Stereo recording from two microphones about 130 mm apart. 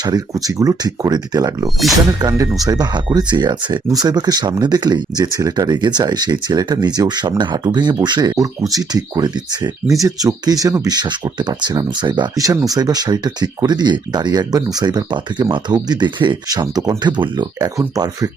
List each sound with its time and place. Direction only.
0.0 s speech: 30° right (ahead or behind)